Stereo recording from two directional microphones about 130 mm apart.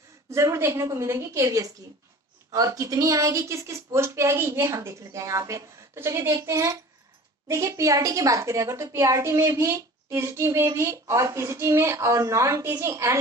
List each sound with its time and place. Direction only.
0.3 s a woman's voice: 20° right (ahead or behind)